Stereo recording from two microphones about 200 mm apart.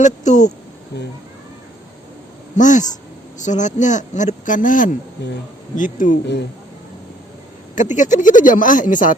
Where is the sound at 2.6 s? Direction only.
40° left (ahead or behind).